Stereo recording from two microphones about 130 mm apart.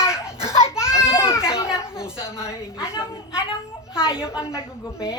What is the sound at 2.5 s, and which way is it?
Speech, 20° left (ahead or behind).